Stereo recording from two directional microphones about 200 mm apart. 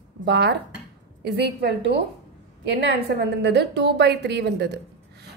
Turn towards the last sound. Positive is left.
turn(degrees=-55)  # may be behind; listen again after turning